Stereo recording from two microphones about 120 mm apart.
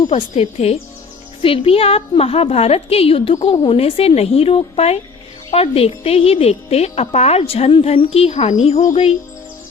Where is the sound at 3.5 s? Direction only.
40° left (ahead or behind).